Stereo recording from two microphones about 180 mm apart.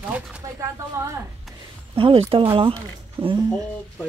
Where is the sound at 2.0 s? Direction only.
30° right (ahead or behind).